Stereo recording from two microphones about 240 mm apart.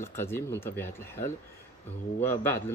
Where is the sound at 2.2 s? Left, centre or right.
Centre.